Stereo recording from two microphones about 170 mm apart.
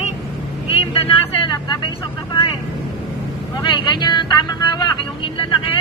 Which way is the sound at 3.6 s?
25° left (ahead or behind).